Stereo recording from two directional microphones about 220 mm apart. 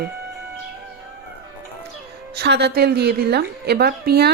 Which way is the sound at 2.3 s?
50° right (ahead or behind).